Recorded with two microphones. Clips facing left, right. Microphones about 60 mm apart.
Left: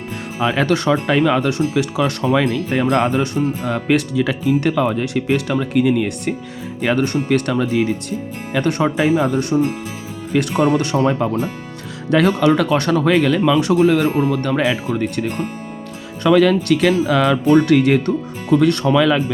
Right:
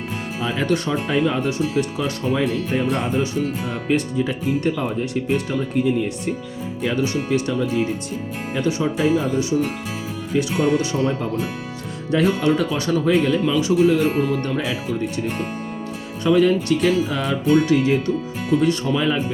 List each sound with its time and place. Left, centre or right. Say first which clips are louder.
0.4 s speech: left 6 dB; left
6.8 s speech: left 4 dB; left
10.3 s speech: left 3 dB; left
10.8 s speech: left 4 dB; left
12.1 s speech: left 4 dB; left
16.2 s speech: left 3 dB; left
17.7 s speech: left 4 dB; left
18.5 s speech: left 5 dB; left